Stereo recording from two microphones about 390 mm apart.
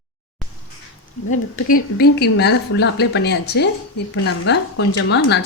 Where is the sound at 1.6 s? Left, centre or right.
Left.